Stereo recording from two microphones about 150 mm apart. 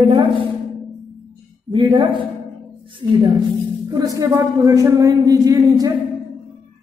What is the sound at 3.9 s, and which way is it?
A man's voice, 20° right (ahead or behind).